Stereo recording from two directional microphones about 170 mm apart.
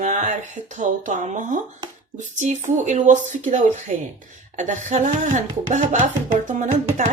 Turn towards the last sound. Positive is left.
turn(degrees=-45)  # may be behind; listen again after turning